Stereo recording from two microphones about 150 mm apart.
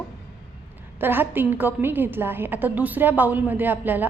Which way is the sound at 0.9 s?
15° right (ahead or behind).